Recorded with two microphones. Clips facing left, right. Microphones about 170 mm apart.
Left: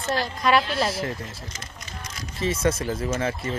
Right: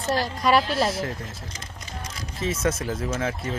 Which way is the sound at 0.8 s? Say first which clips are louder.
Right 1 dB; centre (ahead or behind).